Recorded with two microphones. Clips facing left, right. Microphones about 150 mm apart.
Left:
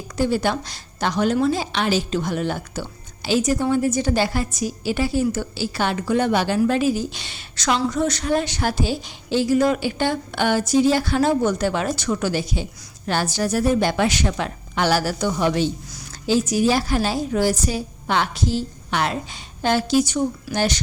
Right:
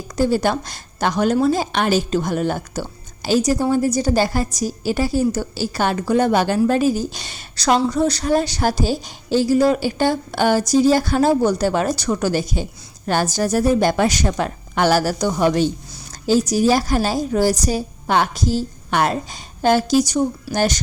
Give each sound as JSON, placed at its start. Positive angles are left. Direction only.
{"t": 0.2, "sound": "a woman's voice", "side_deg": -40}